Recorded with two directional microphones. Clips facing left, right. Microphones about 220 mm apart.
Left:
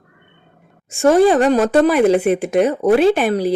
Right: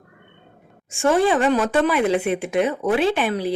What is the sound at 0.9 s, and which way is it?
Speech, 40° left (ahead or behind).